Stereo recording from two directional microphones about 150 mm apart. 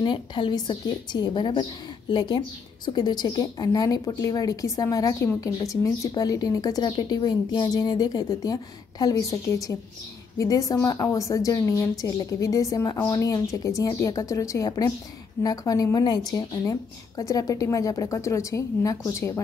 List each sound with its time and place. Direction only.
0.0 s a woman's voice: 30° left (ahead or behind)